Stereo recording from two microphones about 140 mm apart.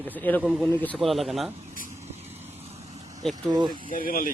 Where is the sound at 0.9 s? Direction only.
Centre (ahead or behind).